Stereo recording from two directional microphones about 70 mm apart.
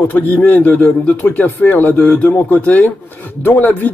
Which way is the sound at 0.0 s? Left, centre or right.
Left.